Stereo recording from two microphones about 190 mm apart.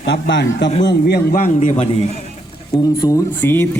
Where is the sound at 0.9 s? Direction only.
55° left (ahead or behind); by 2.0 s 30° left (ahead or behind).